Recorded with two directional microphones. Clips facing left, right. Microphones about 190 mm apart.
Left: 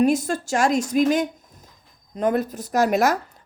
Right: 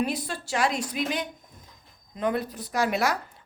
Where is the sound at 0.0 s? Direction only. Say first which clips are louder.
Left 9 dB; 45° left (ahead or behind).